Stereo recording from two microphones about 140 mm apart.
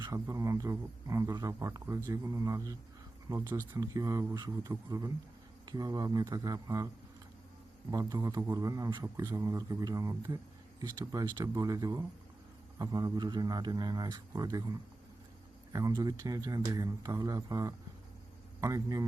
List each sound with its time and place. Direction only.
0.1 s a man's voice: 20° right (ahead or behind)